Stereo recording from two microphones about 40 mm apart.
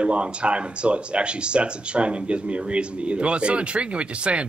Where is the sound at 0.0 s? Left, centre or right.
Right.